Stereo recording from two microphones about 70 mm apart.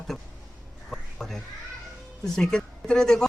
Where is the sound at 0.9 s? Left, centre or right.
Centre.